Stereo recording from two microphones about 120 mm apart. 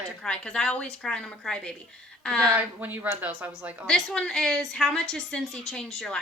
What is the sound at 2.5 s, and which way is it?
Speech, 15° right (ahead or behind).